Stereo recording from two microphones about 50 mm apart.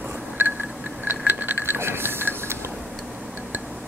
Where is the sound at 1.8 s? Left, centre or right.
Right.